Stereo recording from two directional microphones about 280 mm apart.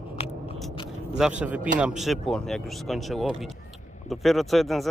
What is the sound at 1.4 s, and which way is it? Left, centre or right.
Speech, centre.